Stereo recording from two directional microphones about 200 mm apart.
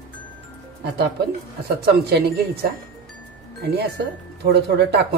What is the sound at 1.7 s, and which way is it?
Speech, 55° right (ahead or behind).